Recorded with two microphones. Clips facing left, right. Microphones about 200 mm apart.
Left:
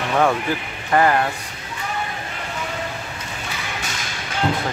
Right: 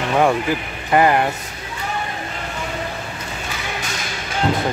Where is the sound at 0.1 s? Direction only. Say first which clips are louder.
Right 2 dB; 15° right (ahead or behind).